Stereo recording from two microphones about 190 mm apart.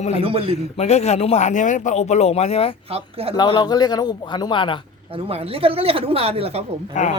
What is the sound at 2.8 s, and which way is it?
Speech, 30° right (ahead or behind).